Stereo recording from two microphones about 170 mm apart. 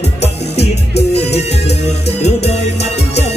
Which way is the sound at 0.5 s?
75° left (ahead or behind).